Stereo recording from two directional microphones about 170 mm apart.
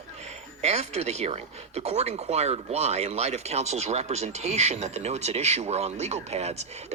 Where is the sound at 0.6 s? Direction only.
40° right (ahead or behind).